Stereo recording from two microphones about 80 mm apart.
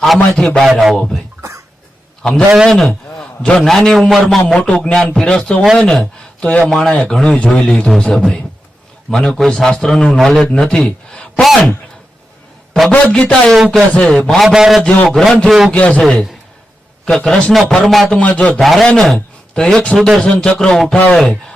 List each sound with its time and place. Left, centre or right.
0.0 s a man's voice: centre
1.4 s cough: right
2.2 s a man's voice: centre
12.9 s a man's voice: centre
15.7 s a man's voice: centre
17.2 s a man's voice: centre
18.2 s a man's voice: centre
18.6 s a man's voice: centre
18.9 s a sound: centre
19.6 s a man's voice: centre
20.0 s a man's voice: centre
20.2 s a man's voice: centre